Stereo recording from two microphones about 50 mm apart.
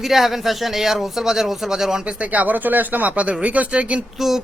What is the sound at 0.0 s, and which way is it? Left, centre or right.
Speech, centre.